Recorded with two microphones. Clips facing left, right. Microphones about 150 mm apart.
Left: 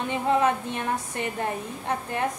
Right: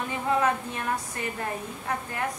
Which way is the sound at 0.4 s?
25° left (ahead or behind).